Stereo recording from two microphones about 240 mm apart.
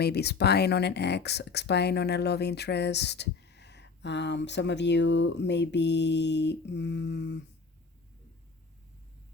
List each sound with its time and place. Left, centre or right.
0.0 s speech: left